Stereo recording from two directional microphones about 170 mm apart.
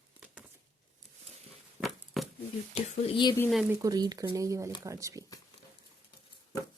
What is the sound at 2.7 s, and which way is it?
Humming, 30° left (ahead or behind).